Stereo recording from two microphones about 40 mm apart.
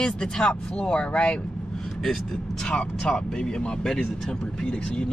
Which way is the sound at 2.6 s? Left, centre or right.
Left.